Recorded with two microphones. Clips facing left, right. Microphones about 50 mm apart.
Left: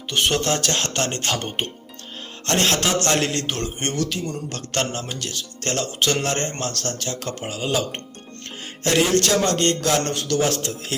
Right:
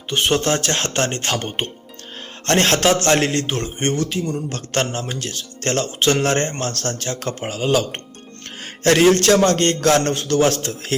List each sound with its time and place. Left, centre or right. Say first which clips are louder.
0.1 s a man's voice: right 3 dB; right